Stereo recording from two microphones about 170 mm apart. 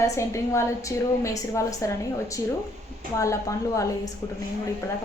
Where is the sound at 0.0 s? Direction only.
15° left (ahead or behind).